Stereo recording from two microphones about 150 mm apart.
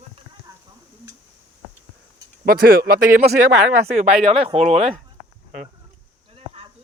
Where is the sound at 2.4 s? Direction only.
80° right.